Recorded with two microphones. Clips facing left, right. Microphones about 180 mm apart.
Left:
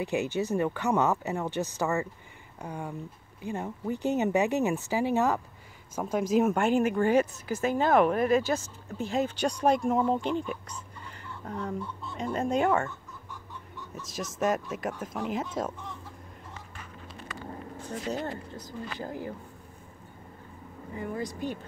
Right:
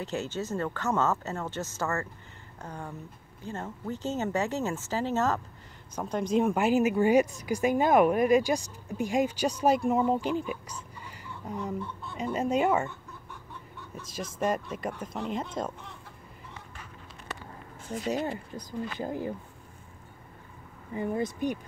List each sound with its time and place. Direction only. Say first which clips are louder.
0.0 s speech: left 4 dB; 15° left (ahead or behind); by 12.8 s 5° right (ahead or behind)
14.0 s speech: left 1 dB; centre (ahead or behind)
18.0 s speech: right 3 dB; 10° right (ahead or behind)
20.9 s speech: right 4 dB; 20° right (ahead or behind)